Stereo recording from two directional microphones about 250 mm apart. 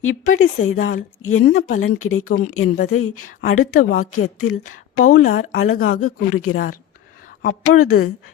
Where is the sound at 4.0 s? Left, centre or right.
Left.